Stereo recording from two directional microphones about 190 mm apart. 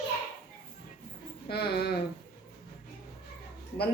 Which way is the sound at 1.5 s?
60° left (ahead or behind).